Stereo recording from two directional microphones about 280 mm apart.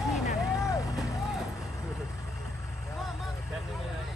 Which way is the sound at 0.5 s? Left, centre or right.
Centre.